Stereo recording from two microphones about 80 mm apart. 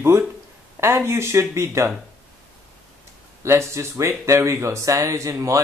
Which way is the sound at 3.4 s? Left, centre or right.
Right.